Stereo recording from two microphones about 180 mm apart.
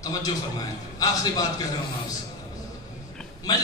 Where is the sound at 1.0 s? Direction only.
20° left (ahead or behind).